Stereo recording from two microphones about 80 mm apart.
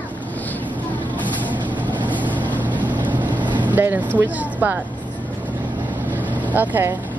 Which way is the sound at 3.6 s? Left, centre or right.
Right.